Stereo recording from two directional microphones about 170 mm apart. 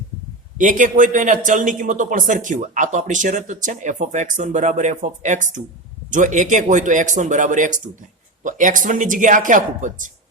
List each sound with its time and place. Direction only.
0.6 s a man's voice: 50° right (ahead or behind)